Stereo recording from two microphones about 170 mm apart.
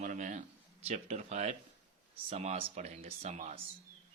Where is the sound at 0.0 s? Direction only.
45° right (ahead or behind).